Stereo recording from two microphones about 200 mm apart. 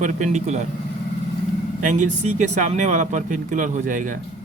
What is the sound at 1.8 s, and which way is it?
Speech, 40° right (ahead or behind).